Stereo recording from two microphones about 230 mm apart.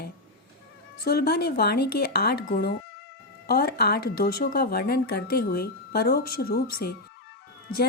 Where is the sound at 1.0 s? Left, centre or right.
Left.